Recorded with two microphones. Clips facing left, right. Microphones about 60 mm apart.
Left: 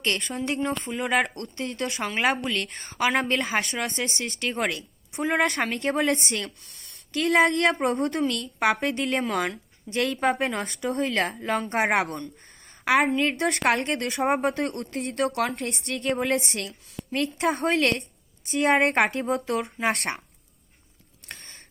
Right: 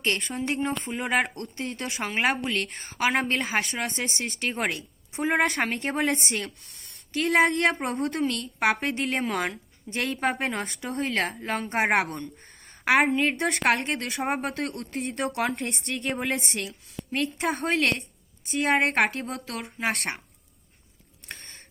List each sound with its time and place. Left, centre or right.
0.0 s a woman's voice: centre
4.0 s a woman's voice: centre
4.4 s a woman's voice: centre
4.7 s a woman's voice: right
5.4 s a woman's voice: centre
5.6 s speech: centre
7.2 s a woman's voice: centre
15.1 s a woman's voice: right
16.0 s a woman's voice: centre